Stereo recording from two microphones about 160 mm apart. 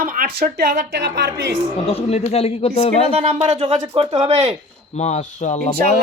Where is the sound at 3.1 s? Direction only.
40° right (ahead or behind).